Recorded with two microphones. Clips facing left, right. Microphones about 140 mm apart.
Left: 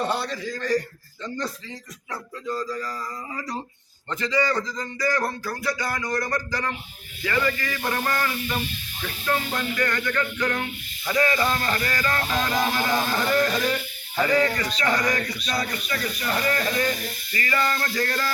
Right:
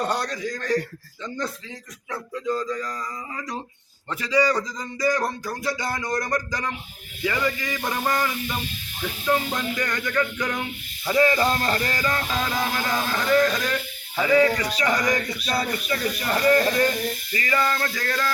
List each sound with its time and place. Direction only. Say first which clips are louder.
0.1 s speech: right 1 dB; 5° left (ahead or behind)
4.1 s speech: right 2 dB; 10° right (ahead or behind)
11.0 s speech: right 3 dB; 25° right (ahead or behind)
12.1 s speech: left 1 dB; 5° right (ahead or behind)
14.2 s speech: right 3 dB; 10° right (ahead or behind)
15.5 s speech: right 3 dB; 30° right (ahead or behind)
17.3 s speech: right 1 dB; 15° right (ahead or behind)
17.7 s speech: even; centre (ahead or behind)